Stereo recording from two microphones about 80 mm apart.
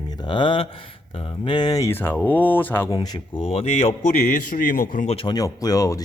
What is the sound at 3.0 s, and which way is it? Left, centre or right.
Speech, left.